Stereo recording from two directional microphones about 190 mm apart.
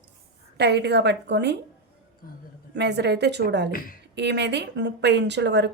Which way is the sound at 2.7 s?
65° right (ahead or behind).